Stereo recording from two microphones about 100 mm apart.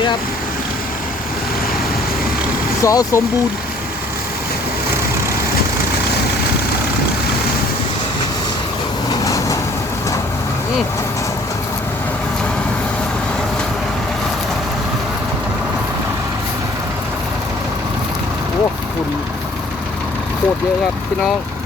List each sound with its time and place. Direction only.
2.8 s speech: 35° left (ahead or behind)
9.0 s vehicle: 35° left (ahead or behind)